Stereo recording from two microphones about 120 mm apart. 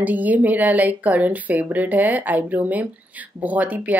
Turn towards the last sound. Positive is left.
turn(degrees=-15)  # may be behind; listen again after turning